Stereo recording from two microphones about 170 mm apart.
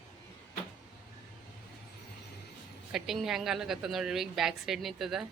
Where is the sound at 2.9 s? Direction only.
Centre (ahead or behind).